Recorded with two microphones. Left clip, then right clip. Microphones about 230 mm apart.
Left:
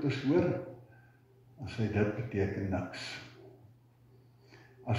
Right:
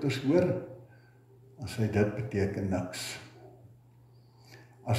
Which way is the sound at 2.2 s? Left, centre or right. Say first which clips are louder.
Right 2 dB; right.